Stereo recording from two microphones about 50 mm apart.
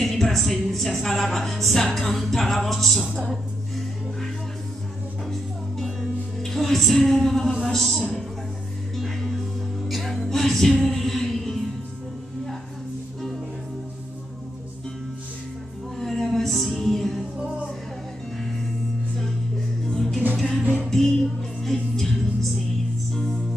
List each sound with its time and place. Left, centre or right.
0.0 s speech: centre
5.8 s music: centre
7.6 s a woman's voice: centre
8.9 s music: centre
16.0 s music: centre
17.4 s music: centre
19.9 s music: centre